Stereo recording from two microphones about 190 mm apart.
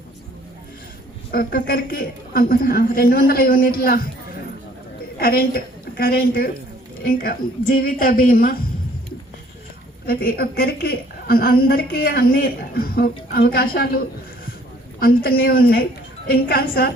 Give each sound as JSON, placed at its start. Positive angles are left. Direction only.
{"t": 1.3, "sound": "a woman's voice", "side_deg": 50}
{"t": 5.2, "sound": "a woman's voice", "side_deg": 50}
{"t": 10.1, "sound": "a woman's voice", "side_deg": 50}